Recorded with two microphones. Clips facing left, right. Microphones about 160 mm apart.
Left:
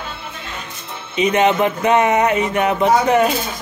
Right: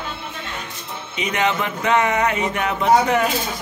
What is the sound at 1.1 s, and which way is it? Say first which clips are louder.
Speech: left 7 dB; 25° left (ahead or behind).